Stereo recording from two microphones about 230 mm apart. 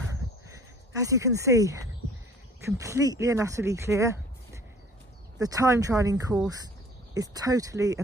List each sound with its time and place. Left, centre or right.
0.9 s speech: centre
5.4 s speech: centre